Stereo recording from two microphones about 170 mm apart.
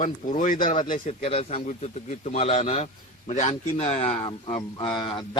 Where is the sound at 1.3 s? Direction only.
35° left (ahead or behind).